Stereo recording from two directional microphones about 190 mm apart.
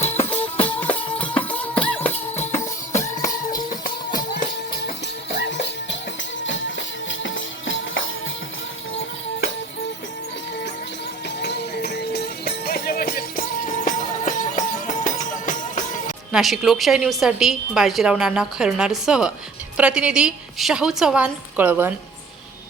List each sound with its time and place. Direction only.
0.0 s music: 35° left (ahead or behind)
0.6 s music: 10° left (ahead or behind)
3.8 s music: 50° left (ahead or behind)
5.5 s music: 70° left (ahead or behind); by 8.1 s 90° left
11.4 s music: 55° left (ahead or behind)
16.3 s a woman's voice: centre (ahead or behind)